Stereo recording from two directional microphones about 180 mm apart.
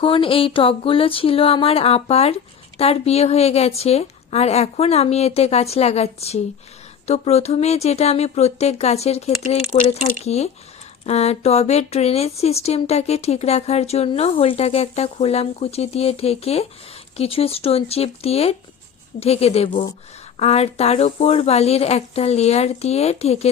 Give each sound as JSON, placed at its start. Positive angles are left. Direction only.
{"t": 0.0, "sound": "speech", "side_deg": 30}